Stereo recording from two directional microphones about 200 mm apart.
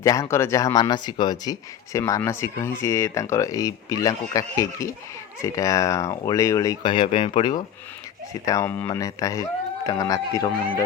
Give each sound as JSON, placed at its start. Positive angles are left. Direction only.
{"t": 0.0, "sound": "speech", "side_deg": 15}